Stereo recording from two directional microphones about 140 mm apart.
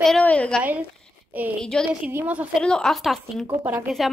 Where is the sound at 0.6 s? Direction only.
10° right (ahead or behind).